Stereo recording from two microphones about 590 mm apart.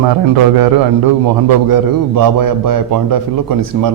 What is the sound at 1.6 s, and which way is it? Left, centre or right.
A man's voice, right.